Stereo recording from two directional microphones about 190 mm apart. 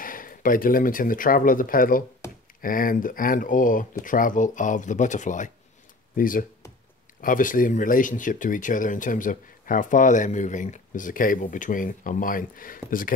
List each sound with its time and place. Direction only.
0.0 s speech: 45° left (ahead or behind)